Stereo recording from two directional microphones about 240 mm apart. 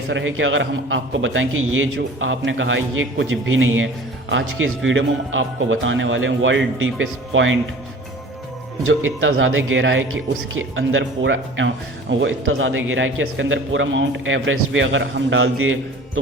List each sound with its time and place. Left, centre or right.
0.1 s speech: right
8.8 s speech: right